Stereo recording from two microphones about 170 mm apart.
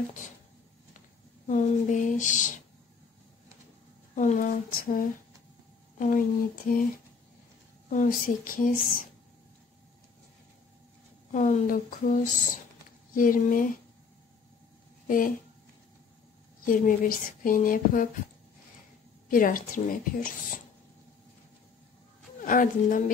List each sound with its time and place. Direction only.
1.5 s speech: 50° left (ahead or behind)
4.1 s speech: 45° left (ahead or behind)
7.9 s speech: 50° left (ahead or behind)
11.3 s speech: 45° left (ahead or behind)
15.0 s speech: 50° left (ahead or behind)
16.6 s speech: 55° left (ahead or behind)
19.2 s speech: 55° left (ahead or behind)
22.4 s speech: 50° left (ahead or behind)